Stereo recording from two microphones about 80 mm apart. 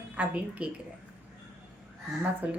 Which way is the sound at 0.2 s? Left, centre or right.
Centre.